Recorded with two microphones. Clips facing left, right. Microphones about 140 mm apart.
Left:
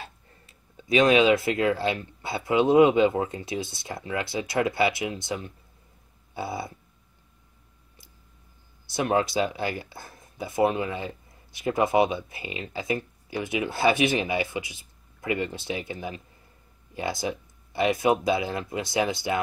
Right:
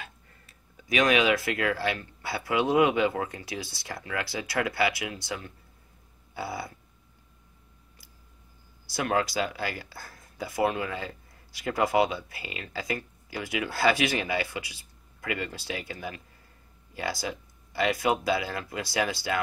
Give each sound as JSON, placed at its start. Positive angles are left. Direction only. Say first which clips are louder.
{"t": 0.0, "sound": "speech", "louder": "left 3 dB", "side_deg": 25}
{"t": 8.8, "sound": "speech", "louder": "left 3 dB", "side_deg": 20}